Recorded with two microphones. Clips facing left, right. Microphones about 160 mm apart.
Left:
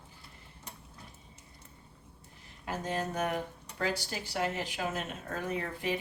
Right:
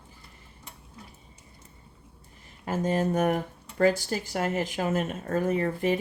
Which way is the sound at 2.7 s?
50° right (ahead or behind).